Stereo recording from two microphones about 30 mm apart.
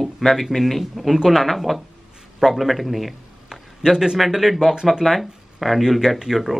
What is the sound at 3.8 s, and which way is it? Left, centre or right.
Speech, centre.